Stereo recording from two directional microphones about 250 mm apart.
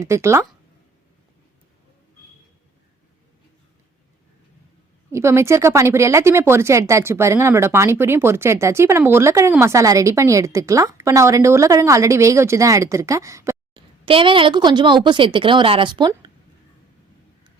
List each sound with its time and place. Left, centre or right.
0.0 s speech: centre
5.1 s a woman's voice: centre